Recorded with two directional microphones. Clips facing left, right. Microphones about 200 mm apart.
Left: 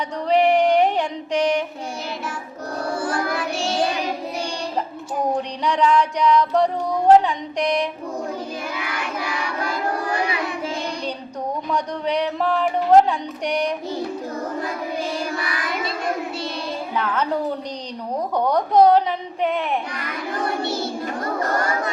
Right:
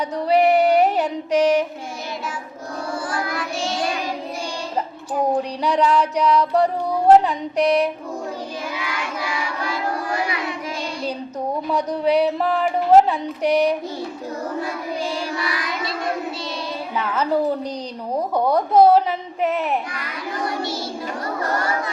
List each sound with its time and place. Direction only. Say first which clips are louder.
0.3 s music: right 1 dB; 5° right (ahead or behind)
3.1 s music: left 2 dB; 55° left (ahead or behind)
5.4 s speech: right 1 dB; 5° right (ahead or behind)
11.7 s speech: right 5 dB; 5° right (ahead or behind)
16.9 s a woman's voice: even; 5° right (ahead or behind)
18.3 s speech: right 1 dB; 5° right (ahead or behind)